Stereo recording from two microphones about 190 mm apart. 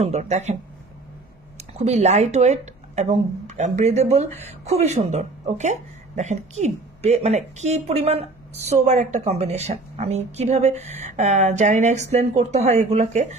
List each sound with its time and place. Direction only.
0.0 s speech: 35° right (ahead or behind)
1.6 s speech: 35° right (ahead or behind)